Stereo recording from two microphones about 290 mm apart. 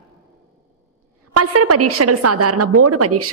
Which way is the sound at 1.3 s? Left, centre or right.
Right.